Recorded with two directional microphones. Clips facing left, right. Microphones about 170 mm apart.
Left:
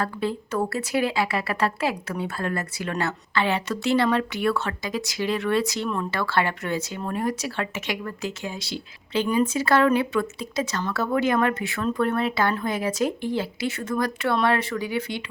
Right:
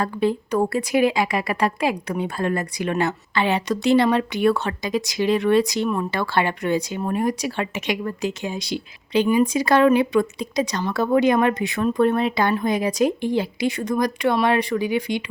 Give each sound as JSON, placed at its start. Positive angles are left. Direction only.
{"t": 0.0, "sound": "speech", "side_deg": -15}